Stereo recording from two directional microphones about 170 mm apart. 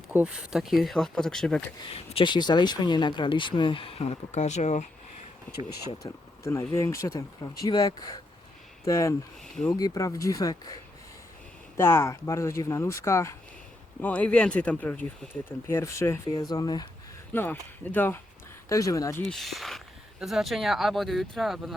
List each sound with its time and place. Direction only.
0.1 s speech: 5° right (ahead or behind)
1.9 s speech: 35° left (ahead or behind)
5.7 s speech: 20° left (ahead or behind)
11.8 s speech: 15° left (ahead or behind)
17.3 s speech: 10° left (ahead or behind)
19.2 s speech: centre (ahead or behind)